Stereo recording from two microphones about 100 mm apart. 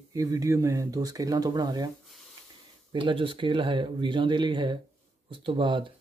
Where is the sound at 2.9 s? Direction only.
60° right (ahead or behind).